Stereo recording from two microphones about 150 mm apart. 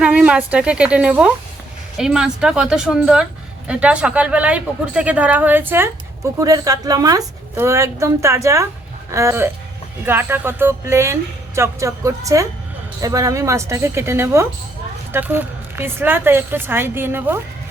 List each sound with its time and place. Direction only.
0.0 s a woman's voice: 5° right (ahead or behind)